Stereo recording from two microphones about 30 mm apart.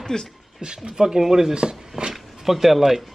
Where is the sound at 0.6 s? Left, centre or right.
Right.